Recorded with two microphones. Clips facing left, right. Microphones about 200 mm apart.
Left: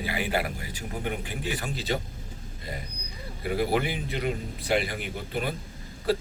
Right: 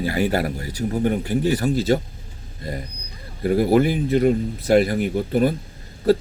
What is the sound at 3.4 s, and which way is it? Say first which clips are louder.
A man's voice: right 9 dB; 45° right (ahead or behind).